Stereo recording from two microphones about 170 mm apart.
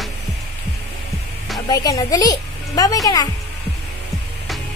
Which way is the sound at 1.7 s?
20° left (ahead or behind).